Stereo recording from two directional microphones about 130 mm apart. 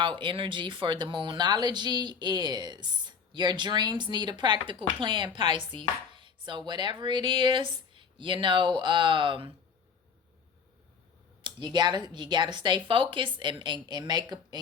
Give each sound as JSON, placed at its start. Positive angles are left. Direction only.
{"t": 0.0, "sound": "speech", "side_deg": -40}
{"t": 11.4, "sound": "speech", "side_deg": -35}